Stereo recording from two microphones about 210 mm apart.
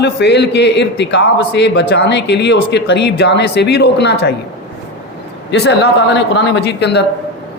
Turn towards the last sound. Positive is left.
turn(degrees=50)  # may be behind; listen again after turning